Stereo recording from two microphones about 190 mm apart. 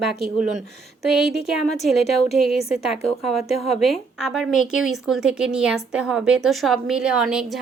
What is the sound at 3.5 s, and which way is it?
Speech, 35° left (ahead or behind).